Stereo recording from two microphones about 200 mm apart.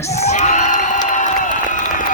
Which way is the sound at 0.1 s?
35° left (ahead or behind).